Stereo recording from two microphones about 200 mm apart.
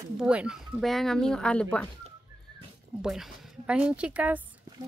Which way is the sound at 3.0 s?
Centre (ahead or behind).